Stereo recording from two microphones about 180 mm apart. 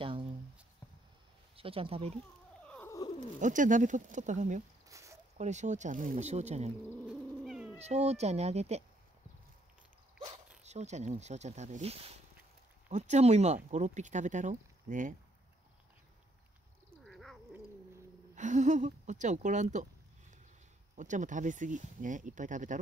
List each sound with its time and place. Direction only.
0.0 s a sound: 30° right (ahead or behind)
1.6 s speech: 30° right (ahead or behind)
2.6 s purr: 5° left (ahead or behind)
2.9 s bird: 20° left (ahead or behind)
3.3 s speech: 45° right (ahead or behind)
4.8 s a sound: 15° right (ahead or behind)
5.4 s speech: 40° right (ahead or behind)
7.1 s cat: 5° right (ahead or behind)
7.8 s speech: 35° right (ahead or behind)
10.6 s speech: 40° right (ahead or behind)
17.0 s cat: centre (ahead or behind)
18.3 s speech: 40° right (ahead or behind)
20.9 s speech: 45° right (ahead or behind)